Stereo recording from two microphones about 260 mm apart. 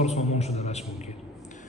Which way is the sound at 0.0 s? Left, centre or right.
Left.